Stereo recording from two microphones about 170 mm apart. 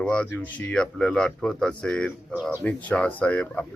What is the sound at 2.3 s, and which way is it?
Speech, 10° right (ahead or behind).